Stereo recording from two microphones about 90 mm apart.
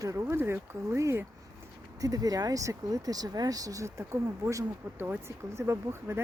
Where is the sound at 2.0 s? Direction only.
45° right (ahead or behind).